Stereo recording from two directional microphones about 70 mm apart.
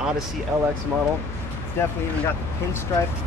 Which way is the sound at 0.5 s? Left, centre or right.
Right.